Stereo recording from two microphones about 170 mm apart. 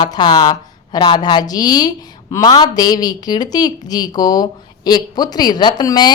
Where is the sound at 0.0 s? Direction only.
25° left (ahead or behind).